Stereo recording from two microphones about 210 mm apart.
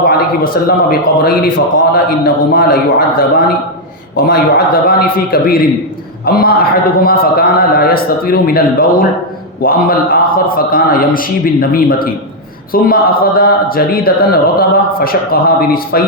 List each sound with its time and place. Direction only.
0.0 s a man's voice: 45° left (ahead or behind)